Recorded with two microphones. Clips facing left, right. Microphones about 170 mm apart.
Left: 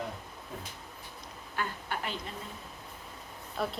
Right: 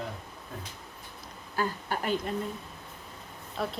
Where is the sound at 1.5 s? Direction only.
40° right (ahead or behind).